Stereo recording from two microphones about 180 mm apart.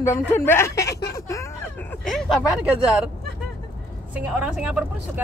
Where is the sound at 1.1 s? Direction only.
15° left (ahead or behind).